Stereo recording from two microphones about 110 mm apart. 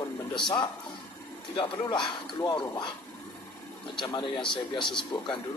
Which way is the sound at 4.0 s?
45° left (ahead or behind).